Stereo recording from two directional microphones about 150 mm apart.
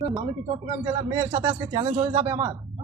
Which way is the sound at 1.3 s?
25° right (ahead or behind).